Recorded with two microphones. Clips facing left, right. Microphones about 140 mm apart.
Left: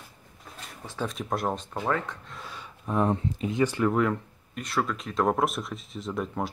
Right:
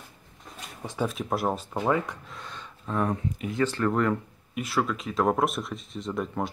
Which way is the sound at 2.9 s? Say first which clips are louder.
Left 2 dB; 25° left (ahead or behind).